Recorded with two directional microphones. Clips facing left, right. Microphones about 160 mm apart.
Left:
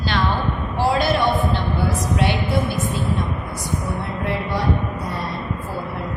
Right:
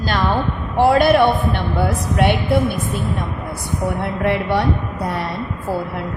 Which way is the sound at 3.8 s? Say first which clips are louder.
Right 10 dB; 70° right (ahead or behind).